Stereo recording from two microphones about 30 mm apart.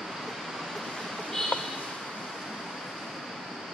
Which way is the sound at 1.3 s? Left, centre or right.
Centre.